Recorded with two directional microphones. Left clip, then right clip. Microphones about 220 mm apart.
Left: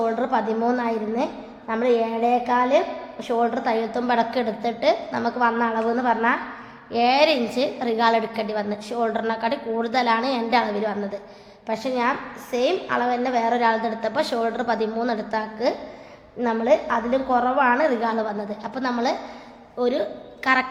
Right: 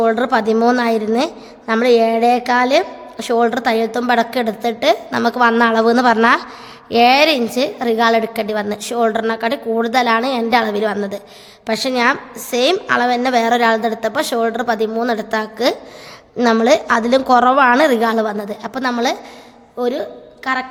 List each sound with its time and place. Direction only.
0.0 s a woman's voice: 45° right (ahead or behind)
6.9 s a woman's voice: 40° right (ahead or behind)
16.4 s a woman's voice: 50° right (ahead or behind)
19.8 s a woman's voice: 25° right (ahead or behind)
20.4 s a woman's voice: 10° right (ahead or behind)